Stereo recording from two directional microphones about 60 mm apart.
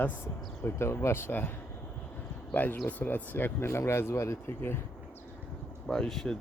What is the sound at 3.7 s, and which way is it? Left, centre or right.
Speech, left.